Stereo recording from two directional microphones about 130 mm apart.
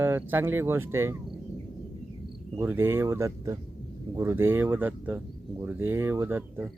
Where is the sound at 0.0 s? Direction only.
15° right (ahead or behind).